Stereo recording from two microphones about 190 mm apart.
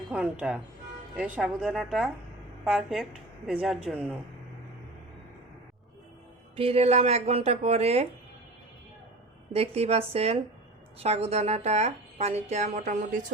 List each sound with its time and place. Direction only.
0.1 s a woman's voice: 5° right (ahead or behind)
6.6 s a woman's voice: 30° right (ahead or behind)
9.5 s a woman's voice: 30° right (ahead or behind)